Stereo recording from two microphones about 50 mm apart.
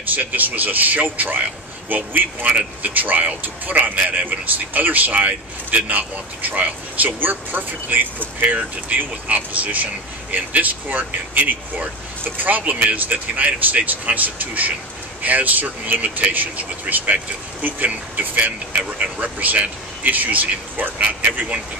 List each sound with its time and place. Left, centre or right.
0.1 s a man's voice: right